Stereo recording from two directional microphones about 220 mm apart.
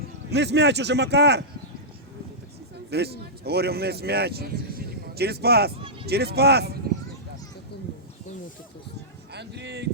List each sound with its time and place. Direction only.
0.3 s speech: 50° right (ahead or behind)
2.9 s speech: 45° right (ahead or behind)
9.3 s speech: 50° right (ahead or behind)